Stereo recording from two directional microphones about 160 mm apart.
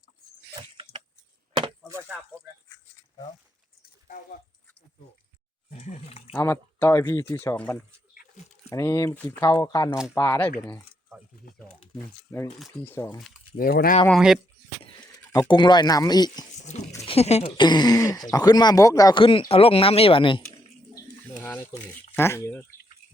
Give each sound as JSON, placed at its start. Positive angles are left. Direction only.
{"t": 5.7, "sound": "water", "side_deg": 40}
{"t": 6.3, "sound": "speech", "side_deg": 15}
{"t": 8.7, "sound": "speech", "side_deg": 20}
{"t": 12.3, "sound": "speech", "side_deg": 20}
{"t": 13.6, "sound": "speech", "side_deg": 65}
{"t": 15.3, "sound": "speech", "side_deg": 25}
{"t": 17.0, "sound": "speech", "side_deg": 40}
{"t": 17.6, "sound": "speech", "side_deg": 25}
{"t": 21.4, "sound": "speech", "side_deg": 10}